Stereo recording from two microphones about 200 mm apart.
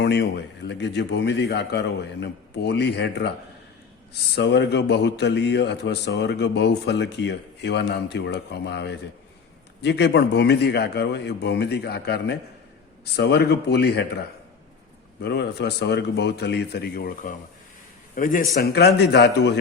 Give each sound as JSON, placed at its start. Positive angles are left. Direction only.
{"t": 0.0, "sound": "speech", "side_deg": 55}
{"t": 4.4, "sound": "a man's voice", "side_deg": 60}
{"t": 18.5, "sound": "speech", "side_deg": 55}